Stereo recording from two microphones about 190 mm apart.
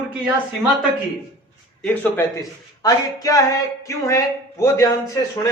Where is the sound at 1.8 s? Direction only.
10° left (ahead or behind).